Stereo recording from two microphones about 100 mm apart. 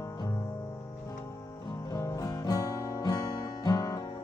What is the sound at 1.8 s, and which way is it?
Music, 40° left (ahead or behind).